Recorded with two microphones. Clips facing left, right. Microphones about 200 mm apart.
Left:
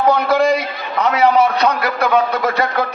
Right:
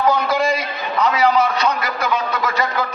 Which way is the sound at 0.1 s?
60° left (ahead or behind).